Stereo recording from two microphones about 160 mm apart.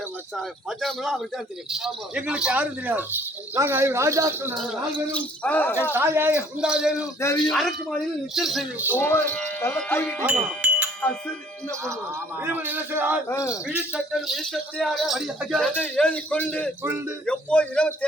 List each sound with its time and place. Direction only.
0.3 s speech: centre (ahead or behind); by 4.5 s 15° right (ahead or behind)
4.5 s speech: centre (ahead or behind)
5.9 s speech: 15° right (ahead or behind)
9.0 s speech: 15° left (ahead or behind)
10.2 s speech: 10° right (ahead or behind)
12.4 s speech: 10° right (ahead or behind)
13.2 s speech: 15° left (ahead or behind)
13.5 s speech: 5° right (ahead or behind)